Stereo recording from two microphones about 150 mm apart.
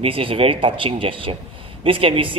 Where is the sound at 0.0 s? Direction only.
35° right (ahead or behind).